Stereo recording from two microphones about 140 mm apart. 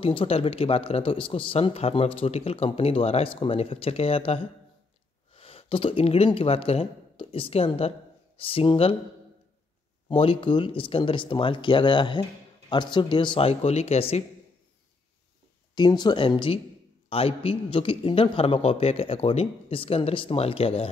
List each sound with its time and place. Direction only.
0.0 s a man's voice: 40° left (ahead or behind)
10.0 s speech: 40° left (ahead or behind)
15.7 s a man's voice: 30° left (ahead or behind)